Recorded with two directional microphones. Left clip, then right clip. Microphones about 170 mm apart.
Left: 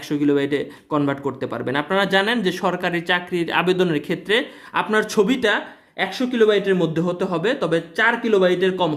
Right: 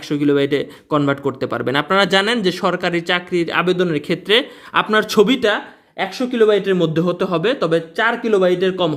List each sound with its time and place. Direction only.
0.1 s speech: 20° right (ahead or behind)
4.0 s speech: 25° right (ahead or behind)